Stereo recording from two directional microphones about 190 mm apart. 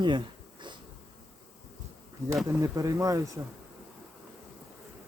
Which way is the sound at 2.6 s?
15° right (ahead or behind).